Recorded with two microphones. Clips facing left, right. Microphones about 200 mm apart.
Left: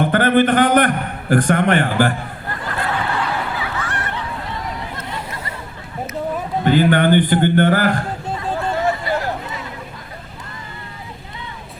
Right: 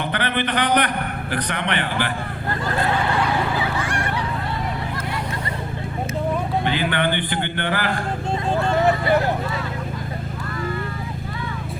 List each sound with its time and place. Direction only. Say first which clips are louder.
0.0 s a man's voice: left 9 dB; 45° left (ahead or behind)
6.7 s a man's voice: left 12 dB; 45° left (ahead or behind)
8.8 s a sound: right 3 dB; 20° right (ahead or behind)